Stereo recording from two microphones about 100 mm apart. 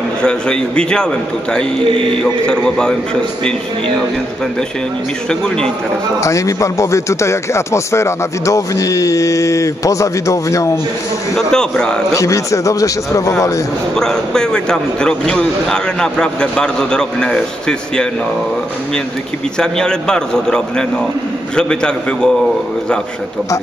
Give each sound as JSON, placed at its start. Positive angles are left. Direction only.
{"t": 0.2, "sound": "a man's voice", "side_deg": 10}
{"t": 5.3, "sound": "a man's voice", "side_deg": 10}
{"t": 6.2, "sound": "speech", "side_deg": 30}
{"t": 11.3, "sound": "a man's voice", "side_deg": 5}
{"t": 12.1, "sound": "speech", "side_deg": 30}
{"t": 13.9, "sound": "a man's voice", "side_deg": 5}
{"t": 19.6, "sound": "a man's voice", "side_deg": 5}